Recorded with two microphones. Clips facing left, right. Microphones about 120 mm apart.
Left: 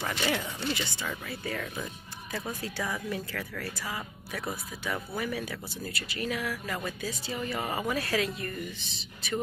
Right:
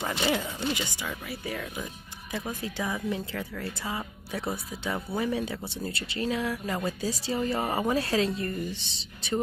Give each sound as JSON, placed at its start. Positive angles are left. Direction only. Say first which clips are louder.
{"t": 0.2, "sound": "a woman's voice", "louder": "right 4 dB", "side_deg": -20}